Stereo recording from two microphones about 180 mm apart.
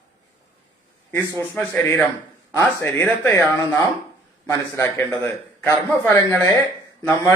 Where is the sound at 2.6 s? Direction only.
15° left (ahead or behind).